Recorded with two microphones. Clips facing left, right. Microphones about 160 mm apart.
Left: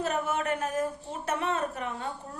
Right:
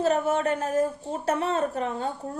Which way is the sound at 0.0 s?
30° right (ahead or behind).